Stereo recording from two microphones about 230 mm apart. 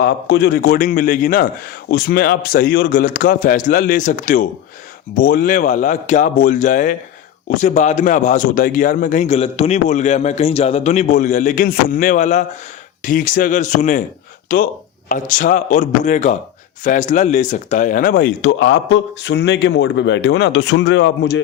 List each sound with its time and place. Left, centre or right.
0.0 s a man's voice: left